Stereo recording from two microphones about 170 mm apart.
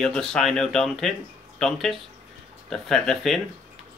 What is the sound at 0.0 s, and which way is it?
Speech, 5° left (ahead or behind).